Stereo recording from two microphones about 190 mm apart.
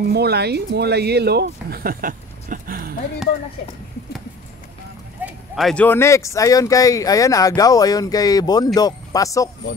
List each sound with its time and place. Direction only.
0.1 s speech: 60° right (ahead or behind)
5.2 s speech: centre (ahead or behind); by 9.5 s 15° left (ahead or behind)